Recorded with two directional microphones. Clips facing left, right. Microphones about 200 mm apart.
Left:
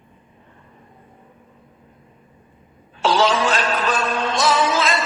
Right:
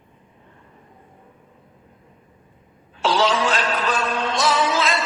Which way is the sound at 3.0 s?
45° left (ahead or behind).